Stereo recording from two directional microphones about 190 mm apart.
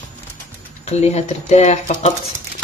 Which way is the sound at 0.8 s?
35° left (ahead or behind).